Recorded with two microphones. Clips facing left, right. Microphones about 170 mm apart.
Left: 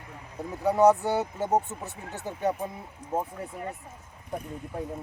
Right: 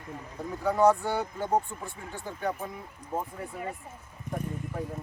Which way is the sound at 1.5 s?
5° left (ahead or behind).